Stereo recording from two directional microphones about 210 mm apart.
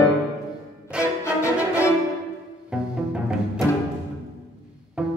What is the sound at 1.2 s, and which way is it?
Music, 15° left (ahead or behind).